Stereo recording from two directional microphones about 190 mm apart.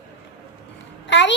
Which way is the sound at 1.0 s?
70° left (ahead or behind).